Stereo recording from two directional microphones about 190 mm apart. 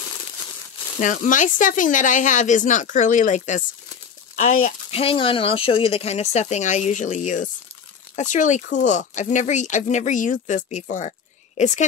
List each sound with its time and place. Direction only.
0.9 s speech: 40° left (ahead or behind)
4.9 s speech: 30° left (ahead or behind)